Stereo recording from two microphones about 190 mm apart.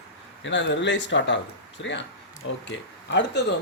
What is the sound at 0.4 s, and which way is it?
Speech, 70° left (ahead or behind).